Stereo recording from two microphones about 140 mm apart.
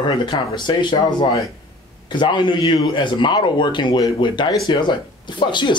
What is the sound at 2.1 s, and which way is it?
A man's voice, 35° left (ahead or behind).